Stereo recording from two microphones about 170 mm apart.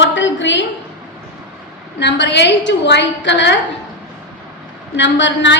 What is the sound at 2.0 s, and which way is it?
A woman's voice, 90° left.